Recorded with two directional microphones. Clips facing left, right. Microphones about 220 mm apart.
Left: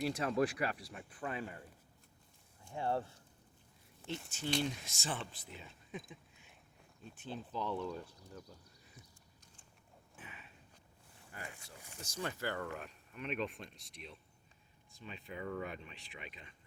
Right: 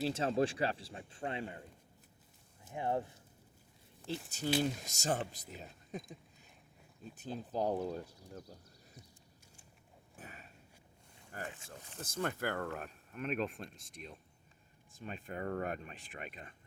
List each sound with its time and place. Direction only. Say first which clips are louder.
0.0 s speech: right 1 dB; 25° right (ahead or behind)
2.6 s speech: right 1 dB; 15° right (ahead or behind)
4.3 s speech: right 3 dB; 40° right (ahead or behind)
7.2 s speech: right 5 dB; 40° right (ahead or behind)
10.2 s a sound: right 3 dB; 40° right (ahead or behind)
11.3 s speech: right 5 dB; 45° right (ahead or behind)